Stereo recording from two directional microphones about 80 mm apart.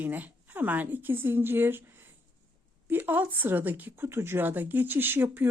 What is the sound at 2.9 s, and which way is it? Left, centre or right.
Speech, right.